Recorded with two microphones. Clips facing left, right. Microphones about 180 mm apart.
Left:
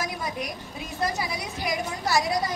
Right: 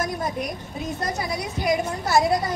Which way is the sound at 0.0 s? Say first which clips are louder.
Right 4 dB; 50° right (ahead or behind).